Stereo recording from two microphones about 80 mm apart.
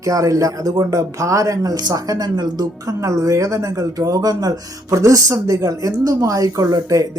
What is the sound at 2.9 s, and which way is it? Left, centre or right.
Speech, right.